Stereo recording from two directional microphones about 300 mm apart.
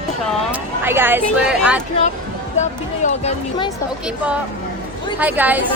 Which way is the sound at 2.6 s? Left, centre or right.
Left.